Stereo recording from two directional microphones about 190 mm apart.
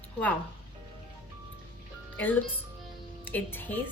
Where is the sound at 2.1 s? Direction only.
10° left (ahead or behind).